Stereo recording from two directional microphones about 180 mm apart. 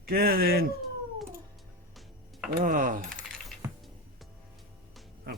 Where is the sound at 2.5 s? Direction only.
50° right (ahead or behind).